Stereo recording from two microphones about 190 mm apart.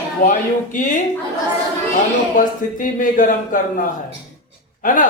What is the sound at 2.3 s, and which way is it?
Speech, 45° left (ahead or behind).